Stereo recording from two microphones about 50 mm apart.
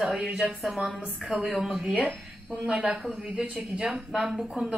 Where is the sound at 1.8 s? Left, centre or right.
Right.